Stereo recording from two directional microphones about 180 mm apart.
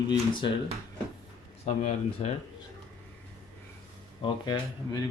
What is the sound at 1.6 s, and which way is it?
Speech, 40° left (ahead or behind).